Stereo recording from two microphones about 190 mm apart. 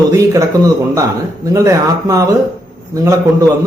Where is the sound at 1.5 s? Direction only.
15° right (ahead or behind).